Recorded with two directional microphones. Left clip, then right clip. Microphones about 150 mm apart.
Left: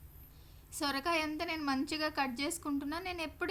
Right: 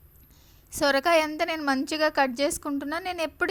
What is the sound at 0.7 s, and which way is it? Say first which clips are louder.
A woman's voice: right 12 dB; 45° right (ahead or behind).